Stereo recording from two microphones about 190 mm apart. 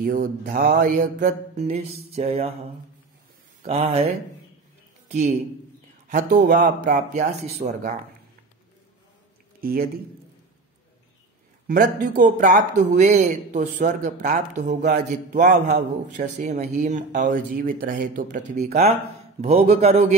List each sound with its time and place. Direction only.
0.0 s speech: 50° right (ahead or behind); by 2.5 s 30° right (ahead or behind)
3.6 s speech: 35° right (ahead or behind)
5.0 s a sound: 40° right (ahead or behind)
6.0 s speech: 45° right (ahead or behind)
9.6 s a man's voice: 50° right (ahead or behind)
11.6 s speech: 45° right (ahead or behind)